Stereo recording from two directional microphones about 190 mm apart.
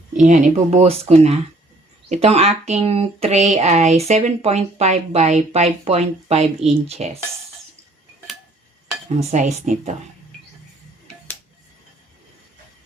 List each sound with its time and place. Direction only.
0.2 s speech: 40° right (ahead or behind)
9.0 s speech: 40° right (ahead or behind)